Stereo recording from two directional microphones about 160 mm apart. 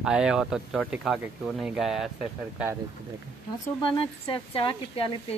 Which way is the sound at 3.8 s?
30° left (ahead or behind).